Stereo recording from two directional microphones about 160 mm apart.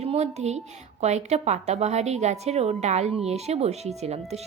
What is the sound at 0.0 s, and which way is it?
A woman's voice, 40° right (ahead or behind).